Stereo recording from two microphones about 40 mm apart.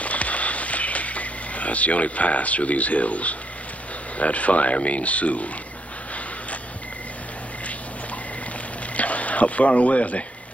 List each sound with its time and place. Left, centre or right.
0.0 s a sound: left
4.2 s speech: left
8.9 s speech: left